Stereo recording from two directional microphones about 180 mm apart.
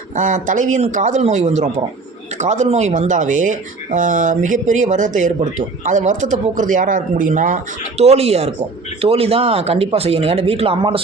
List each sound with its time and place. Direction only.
0.2 s speech: 45° right (ahead or behind)